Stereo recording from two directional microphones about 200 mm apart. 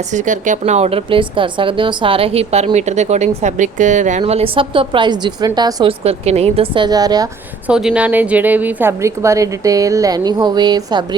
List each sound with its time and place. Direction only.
0.1 s a woman's voice: 40° right (ahead or behind); by 7.3 s 20° right (ahead or behind)
7.7 s a woman's voice: 5° right (ahead or behind); by 11.0 s 20° right (ahead or behind)